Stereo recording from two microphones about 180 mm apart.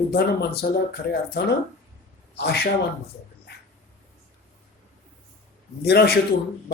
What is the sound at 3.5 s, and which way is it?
Dog, 65° left (ahead or behind).